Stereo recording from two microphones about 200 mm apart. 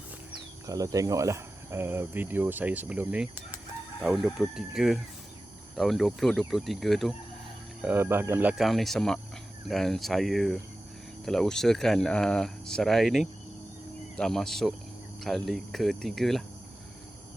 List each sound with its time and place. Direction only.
0.7 s speech: 15° right (ahead or behind); by 16.4 s centre (ahead or behind)